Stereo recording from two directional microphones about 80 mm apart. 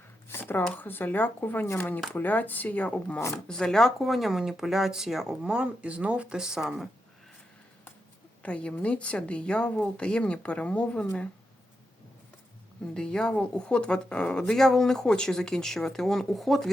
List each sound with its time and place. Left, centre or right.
0.3 s a sound: left
0.6 s speech: left; by 6.8 s centre
8.4 s speech: centre
12.9 s speech: centre